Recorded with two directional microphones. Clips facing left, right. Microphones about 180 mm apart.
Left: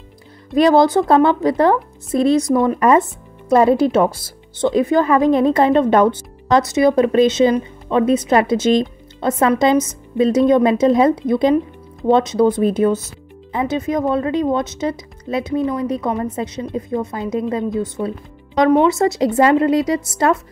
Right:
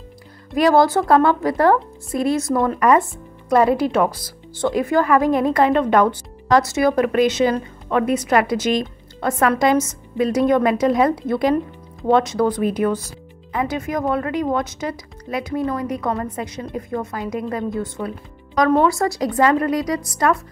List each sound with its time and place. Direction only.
0.6 s speech: 20° left (ahead or behind)